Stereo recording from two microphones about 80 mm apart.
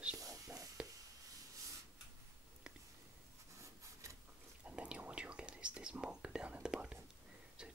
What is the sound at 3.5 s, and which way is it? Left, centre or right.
Rub, right.